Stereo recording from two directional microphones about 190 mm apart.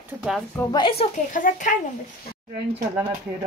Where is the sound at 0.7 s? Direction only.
25° left (ahead or behind).